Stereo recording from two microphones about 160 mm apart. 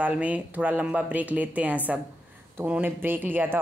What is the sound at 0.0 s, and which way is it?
A woman's voice, 10° right (ahead or behind).